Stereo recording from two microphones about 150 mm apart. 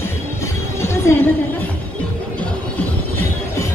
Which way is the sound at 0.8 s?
15° left (ahead or behind).